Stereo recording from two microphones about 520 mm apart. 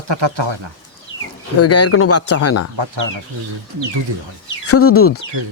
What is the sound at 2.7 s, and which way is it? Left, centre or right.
Speech, right.